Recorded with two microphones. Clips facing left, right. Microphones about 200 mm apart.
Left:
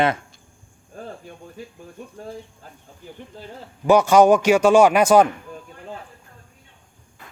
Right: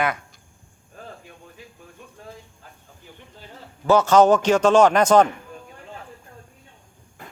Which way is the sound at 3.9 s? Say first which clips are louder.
Left 2 dB; 10° left (ahead or behind).